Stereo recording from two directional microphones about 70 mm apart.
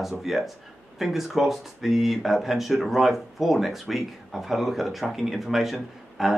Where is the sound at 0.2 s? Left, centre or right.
Centre.